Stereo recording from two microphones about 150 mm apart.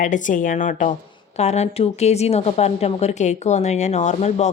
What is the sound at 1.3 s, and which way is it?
A woman's voice, 45° left (ahead or behind).